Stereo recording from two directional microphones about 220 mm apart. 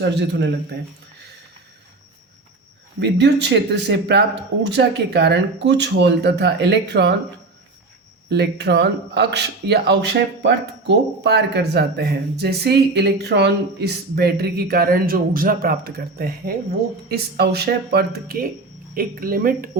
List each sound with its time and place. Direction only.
0.0 s speech: 50° right (ahead or behind)
3.0 s speech: 50° right (ahead or behind)
8.3 s speech: 50° right (ahead or behind)